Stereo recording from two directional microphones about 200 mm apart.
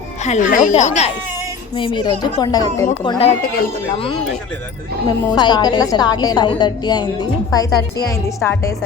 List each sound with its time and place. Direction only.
0.2 s speech: 35° left (ahead or behind)
1.7 s a woman's voice: 25° left (ahead or behind)
5.0 s a woman's voice: 20° left (ahead or behind)